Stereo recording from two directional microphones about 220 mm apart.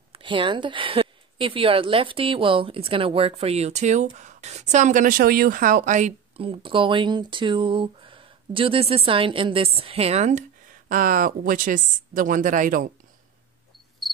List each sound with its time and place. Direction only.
0.1 s a woman's voice: 20° right (ahead or behind); by 12.9 s 40° right (ahead or behind)
14.0 s cricket: centre (ahead or behind)